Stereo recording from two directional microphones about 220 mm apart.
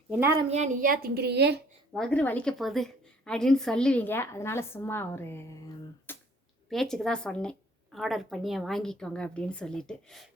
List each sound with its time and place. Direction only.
0.1 s a woman's voice: 10° right (ahead or behind)
0.3 s a woman's voice: 30° right (ahead or behind); by 1.6 s 50° right (ahead or behind)
1.9 s a woman's voice: 5° left (ahead or behind)